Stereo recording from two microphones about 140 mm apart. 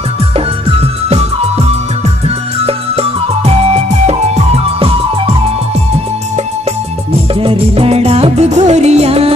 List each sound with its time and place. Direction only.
0.7 s music: 45° right (ahead or behind)
7.3 s music: 40° right (ahead or behind)